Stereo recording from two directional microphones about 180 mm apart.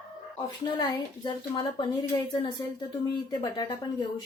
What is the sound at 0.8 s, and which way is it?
A woman's voice, 25° left (ahead or behind).